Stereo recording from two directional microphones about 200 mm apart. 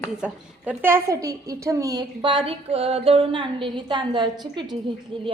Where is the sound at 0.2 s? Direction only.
5° right (ahead or behind).